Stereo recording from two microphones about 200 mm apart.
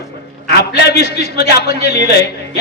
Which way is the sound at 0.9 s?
55° left (ahead or behind).